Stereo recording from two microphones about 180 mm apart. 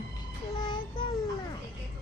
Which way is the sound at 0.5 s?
25° left (ahead or behind).